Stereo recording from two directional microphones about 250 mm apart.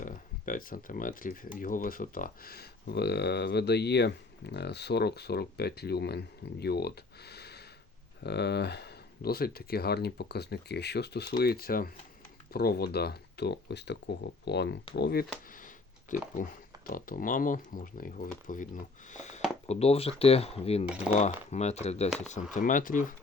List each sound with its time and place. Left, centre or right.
0.0 s speech: left
15.6 s a sound: left
16.4 s speech: left
20.8 s speech: centre
21.5 s speech: left